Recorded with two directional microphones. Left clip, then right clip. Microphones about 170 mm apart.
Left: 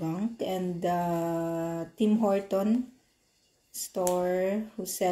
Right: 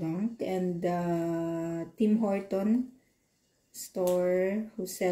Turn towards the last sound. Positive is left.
turn(degrees=25)  # may be behind; listen again after turning